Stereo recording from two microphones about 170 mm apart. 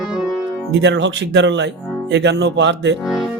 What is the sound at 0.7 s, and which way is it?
Speech, 90° right.